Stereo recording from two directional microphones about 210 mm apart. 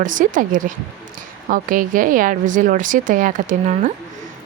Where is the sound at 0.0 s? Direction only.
40° right (ahead or behind).